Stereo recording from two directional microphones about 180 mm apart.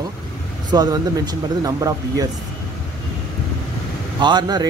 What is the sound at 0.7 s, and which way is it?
Speech, 20° right (ahead or behind).